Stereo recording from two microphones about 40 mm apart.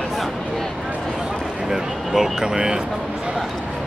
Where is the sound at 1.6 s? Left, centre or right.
Centre.